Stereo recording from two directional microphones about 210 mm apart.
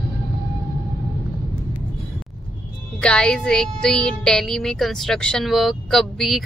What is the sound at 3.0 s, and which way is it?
Music, 5° left (ahead or behind).